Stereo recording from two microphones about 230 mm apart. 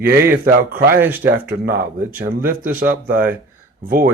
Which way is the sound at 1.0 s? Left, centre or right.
Centre.